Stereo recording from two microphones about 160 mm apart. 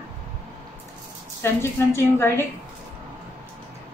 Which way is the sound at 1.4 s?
15° left (ahead or behind).